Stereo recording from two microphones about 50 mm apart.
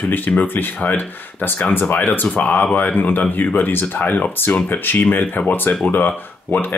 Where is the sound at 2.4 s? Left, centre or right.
Left.